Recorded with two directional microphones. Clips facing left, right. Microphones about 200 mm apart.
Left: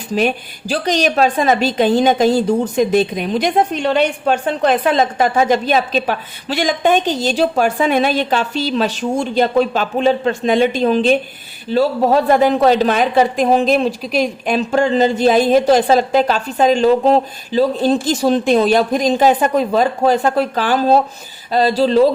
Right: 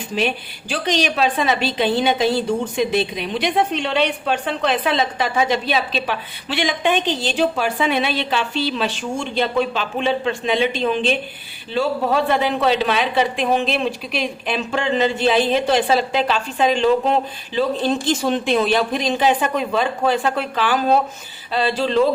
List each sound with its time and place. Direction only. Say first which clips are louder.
0.1 s a woman's voice: left 6 dB; 40° left (ahead or behind)